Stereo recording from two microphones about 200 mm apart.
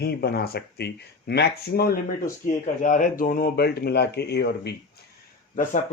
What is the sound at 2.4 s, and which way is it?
Speech, 40° left (ahead or behind).